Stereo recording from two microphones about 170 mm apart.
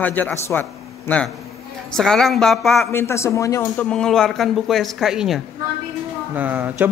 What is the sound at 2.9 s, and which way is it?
A man's voice, 15° left (ahead or behind).